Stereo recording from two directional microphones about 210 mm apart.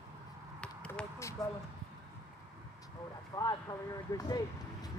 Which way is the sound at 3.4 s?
15° left (ahead or behind).